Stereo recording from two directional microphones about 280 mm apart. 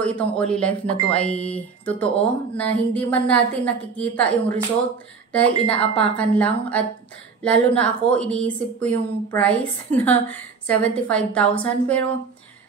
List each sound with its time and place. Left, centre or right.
0.0 s a woman's voice: centre
5.7 s a woman's voice: centre